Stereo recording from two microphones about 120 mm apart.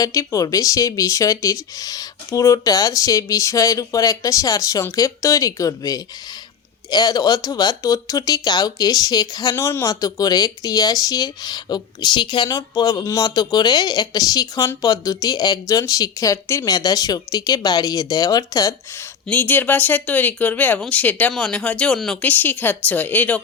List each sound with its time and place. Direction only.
0.0 s speech: 30° left (ahead or behind)
19.3 s speech: 15° left (ahead or behind)